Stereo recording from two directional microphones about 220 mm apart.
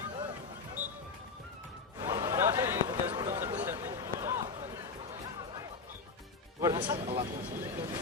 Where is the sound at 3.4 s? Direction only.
10° right (ahead or behind).